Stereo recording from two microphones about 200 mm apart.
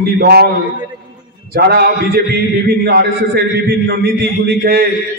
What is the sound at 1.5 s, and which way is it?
A man's voice, 50° right (ahead or behind).